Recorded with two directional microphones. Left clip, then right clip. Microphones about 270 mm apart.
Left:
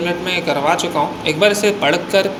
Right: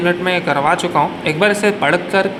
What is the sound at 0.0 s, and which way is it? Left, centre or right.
Speech, centre.